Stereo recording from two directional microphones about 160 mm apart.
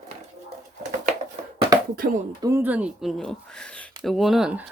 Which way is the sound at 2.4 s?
20° right (ahead or behind).